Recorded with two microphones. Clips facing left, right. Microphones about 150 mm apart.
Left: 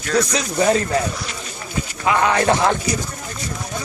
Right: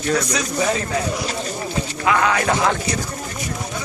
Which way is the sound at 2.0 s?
25° left (ahead or behind).